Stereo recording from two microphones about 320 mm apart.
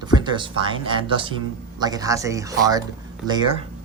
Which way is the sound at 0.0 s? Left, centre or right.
Centre.